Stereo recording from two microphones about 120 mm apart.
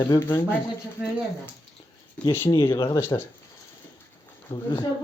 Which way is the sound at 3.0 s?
20° left (ahead or behind).